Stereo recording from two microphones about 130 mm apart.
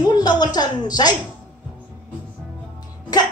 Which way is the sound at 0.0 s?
35° left (ahead or behind).